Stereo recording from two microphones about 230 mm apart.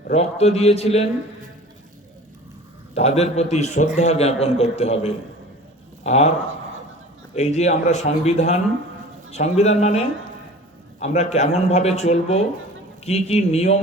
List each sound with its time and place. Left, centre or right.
0.1 s speech: left
2.9 s speech: left
7.3 s speech: left